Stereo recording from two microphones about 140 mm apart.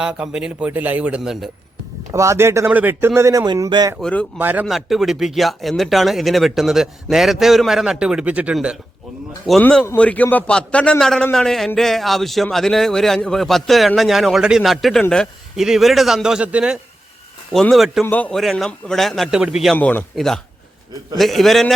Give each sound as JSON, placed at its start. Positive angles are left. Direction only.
{"t": 0.0, "sound": "a man's voice", "side_deg": -5}
{"t": 2.1, "sound": "speech", "side_deg": -20}
{"t": 3.4, "sound": "speech", "side_deg": -30}
{"t": 4.0, "sound": "speech", "side_deg": 10}
{"t": 4.4, "sound": "a man's voice", "side_deg": -15}
{"t": 4.6, "sound": "a man's voice", "side_deg": 0}
{"t": 9.5, "sound": "a man's voice", "side_deg": 5}
{"t": 17.5, "sound": "a man's voice", "side_deg": 0}
{"t": 18.0, "sound": "a man's voice", "side_deg": 10}
{"t": 19.7, "sound": "a man's voice", "side_deg": 10}